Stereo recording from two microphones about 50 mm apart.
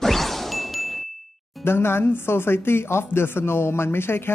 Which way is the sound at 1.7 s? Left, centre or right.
Left.